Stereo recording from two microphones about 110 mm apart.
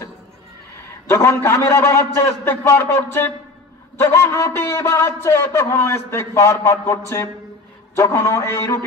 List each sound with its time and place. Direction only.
1.0 s a man's voice: 25° left (ahead or behind)